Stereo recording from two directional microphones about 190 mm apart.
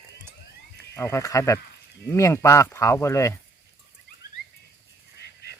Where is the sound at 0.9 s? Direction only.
15° left (ahead or behind).